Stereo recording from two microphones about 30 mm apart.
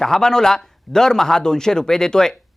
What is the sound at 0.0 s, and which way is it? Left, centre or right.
Speech, centre.